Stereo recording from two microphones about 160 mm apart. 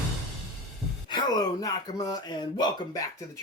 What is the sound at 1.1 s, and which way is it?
Speech, 25° left (ahead or behind).